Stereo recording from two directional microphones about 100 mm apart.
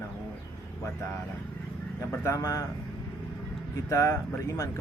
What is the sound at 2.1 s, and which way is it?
Speech, 30° left (ahead or behind).